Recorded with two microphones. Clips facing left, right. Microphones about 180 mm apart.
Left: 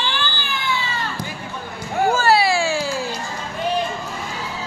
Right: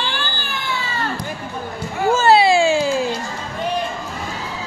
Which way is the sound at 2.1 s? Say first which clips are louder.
Right 6 dB; 25° right (ahead or behind).